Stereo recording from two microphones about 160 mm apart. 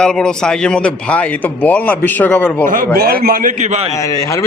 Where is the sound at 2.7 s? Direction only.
65° right (ahead or behind).